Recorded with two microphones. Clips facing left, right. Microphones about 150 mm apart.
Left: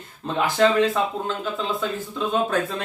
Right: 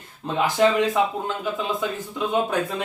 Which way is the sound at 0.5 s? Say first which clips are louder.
Left 1 dB; 15° right (ahead or behind).